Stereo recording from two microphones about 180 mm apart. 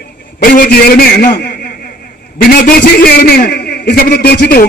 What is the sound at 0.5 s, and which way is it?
A man's voice, 60° left (ahead or behind).